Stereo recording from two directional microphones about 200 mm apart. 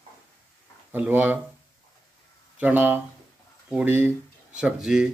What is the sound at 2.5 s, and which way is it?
A man's voice, 10° right (ahead or behind).